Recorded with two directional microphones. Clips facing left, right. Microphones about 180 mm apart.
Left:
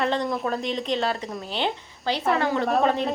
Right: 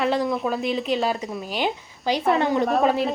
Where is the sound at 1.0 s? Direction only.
15° right (ahead or behind).